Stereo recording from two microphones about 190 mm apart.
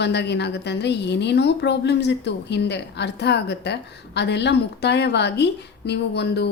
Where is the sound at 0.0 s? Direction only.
65° left (ahead or behind).